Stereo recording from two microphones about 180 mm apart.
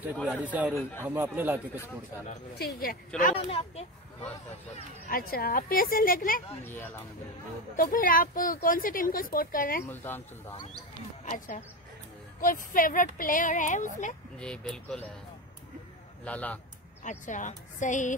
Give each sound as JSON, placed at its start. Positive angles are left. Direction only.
{"t": 0.3, "sound": "speech", "side_deg": -10}
{"t": 2.5, "sound": "speech", "side_deg": 60}
{"t": 3.4, "sound": "speech", "side_deg": 30}
{"t": 5.0, "sound": "speech", "side_deg": 55}
{"t": 6.6, "sound": "speech", "side_deg": 10}
{"t": 7.7, "sound": "speech", "side_deg": 50}
{"t": 9.8, "sound": "speech", "side_deg": 10}
{"t": 11.2, "sound": "speech", "side_deg": 45}
{"t": 14.4, "sound": "speech", "side_deg": 5}
{"t": 16.3, "sound": "speech", "side_deg": 10}
{"t": 17.0, "sound": "speech", "side_deg": 45}